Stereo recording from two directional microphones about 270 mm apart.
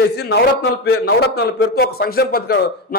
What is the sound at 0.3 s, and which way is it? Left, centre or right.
A man's voice, left.